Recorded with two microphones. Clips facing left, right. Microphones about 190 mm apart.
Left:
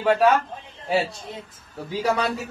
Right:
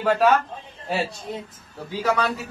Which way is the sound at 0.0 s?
Centre (ahead or behind).